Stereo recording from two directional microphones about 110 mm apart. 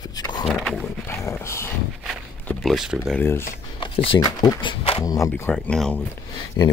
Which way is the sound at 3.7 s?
55° left (ahead or behind).